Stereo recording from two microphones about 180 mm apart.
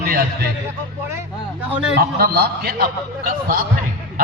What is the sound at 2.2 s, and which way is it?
A man's voice, 60° right (ahead or behind).